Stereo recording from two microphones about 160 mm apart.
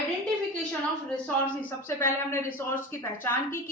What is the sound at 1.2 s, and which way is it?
A woman's voice, 15° left (ahead or behind).